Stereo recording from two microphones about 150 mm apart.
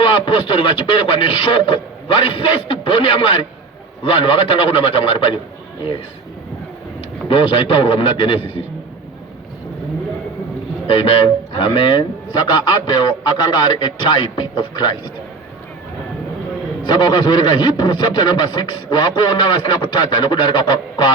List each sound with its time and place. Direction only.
0.0 s speech: 35° left (ahead or behind)
7.3 s speech: 35° left (ahead or behind)
10.8 s speech: 40° left (ahead or behind)
16.8 s speech: 30° left (ahead or behind)